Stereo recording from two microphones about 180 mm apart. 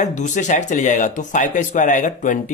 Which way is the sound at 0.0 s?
40° left (ahead or behind).